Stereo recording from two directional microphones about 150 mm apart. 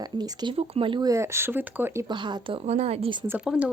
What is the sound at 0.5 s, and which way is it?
Speech, 40° right (ahead or behind).